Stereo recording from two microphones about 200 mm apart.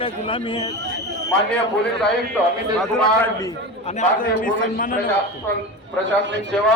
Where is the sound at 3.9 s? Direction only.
40° left (ahead or behind).